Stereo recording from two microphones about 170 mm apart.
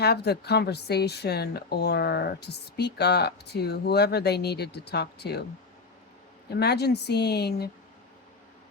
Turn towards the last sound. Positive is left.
turn(degrees=70)  # may be behind; listen again after turning